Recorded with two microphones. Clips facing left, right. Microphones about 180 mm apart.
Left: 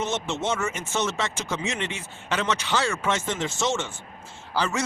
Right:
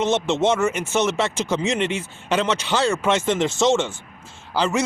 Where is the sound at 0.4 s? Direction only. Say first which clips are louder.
Right 9 dB; 70° right (ahead or behind).